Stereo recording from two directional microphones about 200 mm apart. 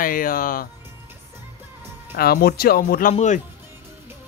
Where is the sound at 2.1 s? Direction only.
50° left (ahead or behind).